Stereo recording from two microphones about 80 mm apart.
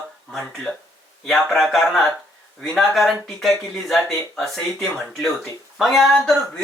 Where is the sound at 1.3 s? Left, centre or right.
Centre.